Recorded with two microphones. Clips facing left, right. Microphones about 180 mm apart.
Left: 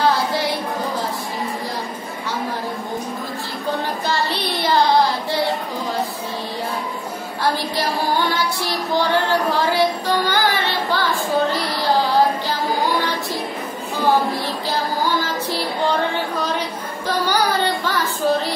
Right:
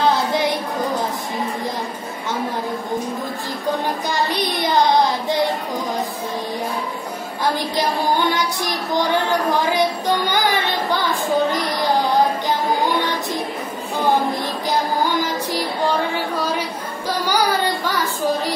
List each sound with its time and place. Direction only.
4.1 s child singing: 15° right (ahead or behind)
8.3 s child singing: 20° right (ahead or behind)
14.7 s a sound: 15° right (ahead or behind)